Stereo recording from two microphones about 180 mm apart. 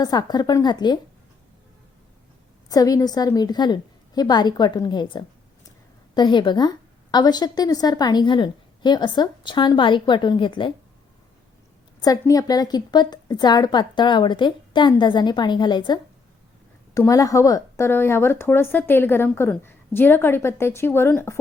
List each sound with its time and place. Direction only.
0.0 s a woman's voice: 20° left (ahead or behind)
2.6 s a woman's voice: 20° left (ahead or behind)
11.9 s a woman's voice: 20° left (ahead or behind)